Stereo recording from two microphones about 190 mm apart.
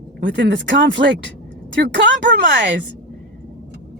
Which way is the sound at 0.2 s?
75° right (ahead or behind).